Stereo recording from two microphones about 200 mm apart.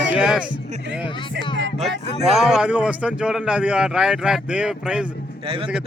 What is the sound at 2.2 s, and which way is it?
A man's voice, centre (ahead or behind).